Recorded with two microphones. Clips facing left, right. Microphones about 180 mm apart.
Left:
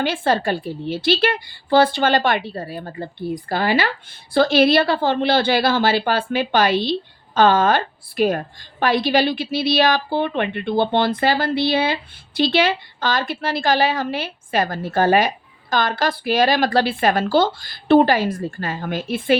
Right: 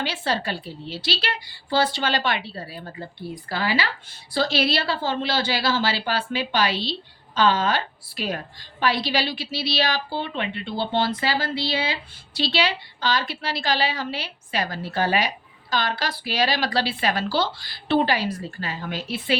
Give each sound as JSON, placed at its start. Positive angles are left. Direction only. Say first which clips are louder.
{"t": 0.0, "sound": "a woman's voice", "louder": "left 7 dB", "side_deg": 50}